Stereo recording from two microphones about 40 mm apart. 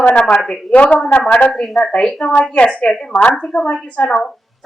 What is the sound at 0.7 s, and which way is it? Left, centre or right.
Speech, left.